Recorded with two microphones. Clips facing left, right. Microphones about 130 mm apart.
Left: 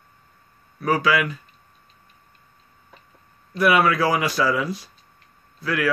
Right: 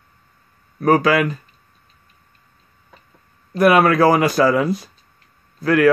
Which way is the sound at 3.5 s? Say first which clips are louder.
Right 5 dB; 45° right (ahead or behind).